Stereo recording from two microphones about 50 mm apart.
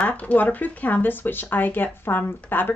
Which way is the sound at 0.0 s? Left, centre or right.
Left.